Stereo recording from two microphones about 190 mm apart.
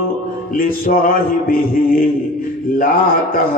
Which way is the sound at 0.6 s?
50° left (ahead or behind).